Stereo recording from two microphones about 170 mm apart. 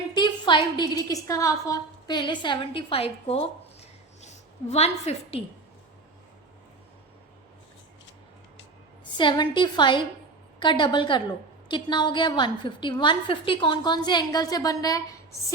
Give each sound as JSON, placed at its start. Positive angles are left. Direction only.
{"t": 0.1, "sound": "a woman's voice", "side_deg": 25}
{"t": 9.1, "sound": "a woman's voice", "side_deg": 25}